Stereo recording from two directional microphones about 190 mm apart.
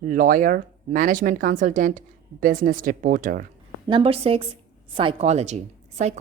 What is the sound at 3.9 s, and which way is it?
A woman's voice, 30° right (ahead or behind).